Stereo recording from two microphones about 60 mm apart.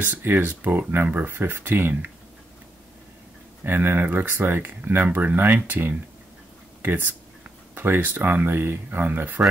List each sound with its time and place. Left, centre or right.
0.0 s speech: right
3.6 s speech: right